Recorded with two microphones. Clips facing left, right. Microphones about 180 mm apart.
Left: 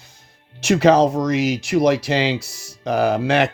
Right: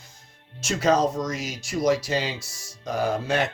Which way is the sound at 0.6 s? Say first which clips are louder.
Left 7 dB; 65° left (ahead or behind).